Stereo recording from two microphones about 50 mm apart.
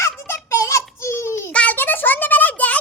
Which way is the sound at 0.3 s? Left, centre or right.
Left.